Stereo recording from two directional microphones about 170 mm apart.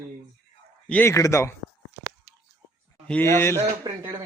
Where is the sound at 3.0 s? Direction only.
10° left (ahead or behind).